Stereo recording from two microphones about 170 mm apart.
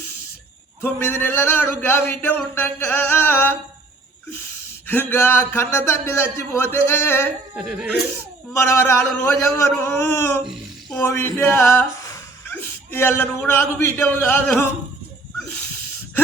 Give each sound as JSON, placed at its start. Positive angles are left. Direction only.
{"t": 0.8, "sound": "speech", "side_deg": 15}
{"t": 4.9, "sound": "speech", "side_deg": 10}
{"t": 7.5, "sound": "speech", "side_deg": -5}
{"t": 8.5, "sound": "speech", "side_deg": 15}